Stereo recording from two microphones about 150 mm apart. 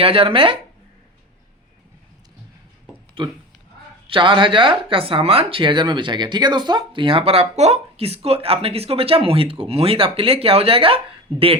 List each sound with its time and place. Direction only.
0.0 s speech: 40° right (ahead or behind)
3.2 s speech: 35° right (ahead or behind)